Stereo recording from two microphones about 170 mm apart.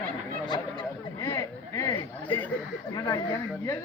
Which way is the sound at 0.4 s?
25° left (ahead or behind).